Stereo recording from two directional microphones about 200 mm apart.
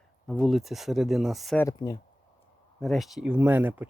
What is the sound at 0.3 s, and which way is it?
Speech, centre (ahead or behind).